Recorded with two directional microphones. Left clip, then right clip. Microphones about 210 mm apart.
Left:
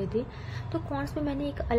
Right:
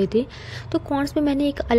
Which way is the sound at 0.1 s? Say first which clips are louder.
Right 9 dB; 45° right (ahead or behind).